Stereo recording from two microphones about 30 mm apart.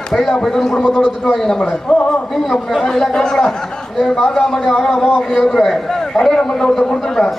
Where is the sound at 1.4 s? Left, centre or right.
Centre.